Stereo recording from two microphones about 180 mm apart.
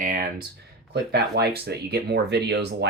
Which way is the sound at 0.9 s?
65° right (ahead or behind).